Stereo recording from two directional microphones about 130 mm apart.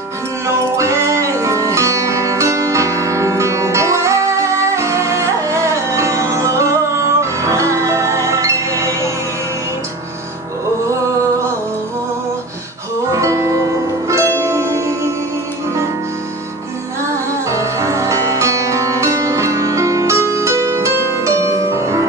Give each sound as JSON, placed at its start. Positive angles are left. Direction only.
{"t": 0.7, "sound": "music", "side_deg": -20}
{"t": 13.1, "sound": "music", "side_deg": -25}
{"t": 17.5, "sound": "music", "side_deg": -25}